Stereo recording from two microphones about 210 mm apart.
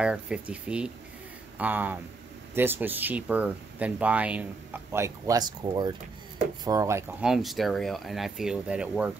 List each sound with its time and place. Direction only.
0.0 s speech: 5° right (ahead or behind)
7.2 s speech: centre (ahead or behind)